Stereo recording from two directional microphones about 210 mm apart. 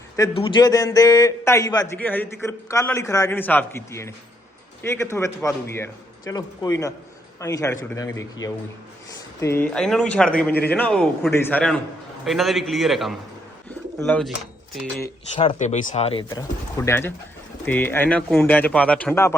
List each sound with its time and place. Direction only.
0.2 s a man's voice: 25° left (ahead or behind); by 10.3 s 5° left (ahead or behind)
10.5 s a man's voice: 50° left (ahead or behind)
10.8 s a man's voice: 5° left (ahead or behind)
15.4 s speech: 30° left (ahead or behind)
16.3 s a man's voice: 15° left (ahead or behind)